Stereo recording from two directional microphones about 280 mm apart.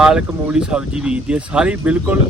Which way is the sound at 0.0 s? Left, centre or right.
Centre.